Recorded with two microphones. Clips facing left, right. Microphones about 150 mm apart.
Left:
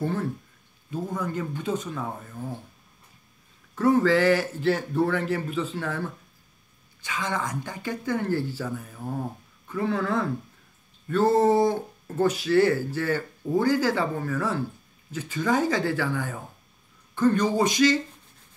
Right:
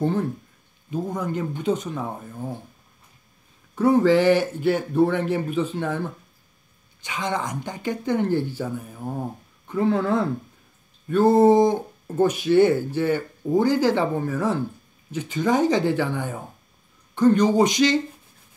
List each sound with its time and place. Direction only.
0.0 s speech: 20° right (ahead or behind)
3.7 s speech: 15° right (ahead or behind)